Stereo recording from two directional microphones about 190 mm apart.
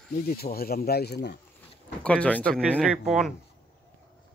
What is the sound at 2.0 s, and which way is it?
Speech, 5° left (ahead or behind).